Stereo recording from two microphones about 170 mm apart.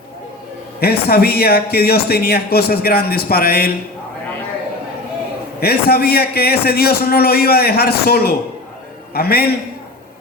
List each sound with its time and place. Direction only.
0.8 s speech: 65° left (ahead or behind)
5.5 s speech: 65° left (ahead or behind)